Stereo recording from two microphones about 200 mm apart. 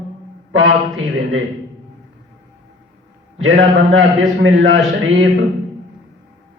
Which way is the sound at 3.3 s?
80° right.